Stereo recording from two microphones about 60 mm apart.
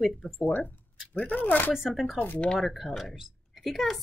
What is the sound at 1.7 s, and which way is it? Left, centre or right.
A woman's voice, centre.